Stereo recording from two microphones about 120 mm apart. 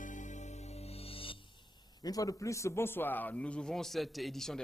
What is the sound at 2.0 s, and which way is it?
A man's voice, 30° left (ahead or behind).